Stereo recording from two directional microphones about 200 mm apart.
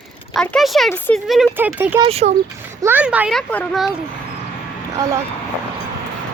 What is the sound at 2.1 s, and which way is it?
Speech, 30° right (ahead or behind).